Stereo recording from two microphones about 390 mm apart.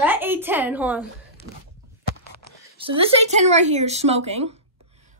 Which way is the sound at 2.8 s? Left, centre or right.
Centre.